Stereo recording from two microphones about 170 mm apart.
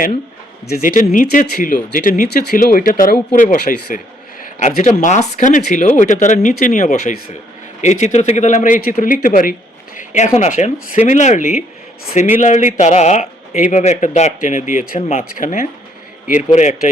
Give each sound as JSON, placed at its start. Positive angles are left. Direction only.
{"t": 0.8, "sound": "a man's voice", "side_deg": 55}
{"t": 15.4, "sound": "a man's voice", "side_deg": 50}